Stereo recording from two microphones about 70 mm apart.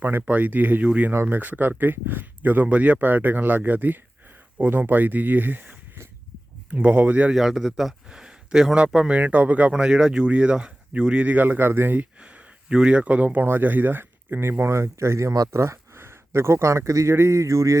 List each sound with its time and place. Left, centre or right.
0.0 s speech: right
1.1 s speech: right
7.3 s speech: centre; by 12.0 s right
12.2 s speech: centre; by 17.7 s right